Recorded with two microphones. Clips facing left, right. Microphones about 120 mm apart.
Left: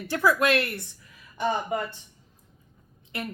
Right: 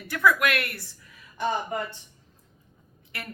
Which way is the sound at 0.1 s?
30° left (ahead or behind).